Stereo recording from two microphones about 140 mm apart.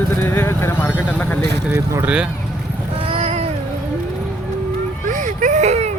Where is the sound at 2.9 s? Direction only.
40° right (ahead or behind).